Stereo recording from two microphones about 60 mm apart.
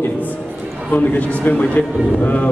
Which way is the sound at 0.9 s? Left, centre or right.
Left.